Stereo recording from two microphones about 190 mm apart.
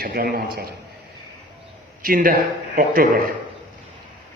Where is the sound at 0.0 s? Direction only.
50° right (ahead or behind).